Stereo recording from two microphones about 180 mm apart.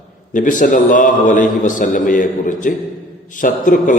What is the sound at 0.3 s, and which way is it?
A man's voice, 45° left (ahead or behind).